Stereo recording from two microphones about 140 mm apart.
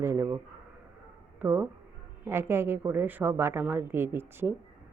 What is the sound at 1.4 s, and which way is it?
Speech, 15° right (ahead or behind).